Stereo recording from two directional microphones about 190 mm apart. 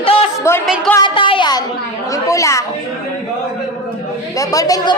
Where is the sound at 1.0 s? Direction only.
25° left (ahead or behind).